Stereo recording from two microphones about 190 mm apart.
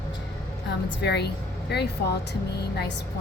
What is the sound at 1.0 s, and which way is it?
Speech, 60° left (ahead or behind).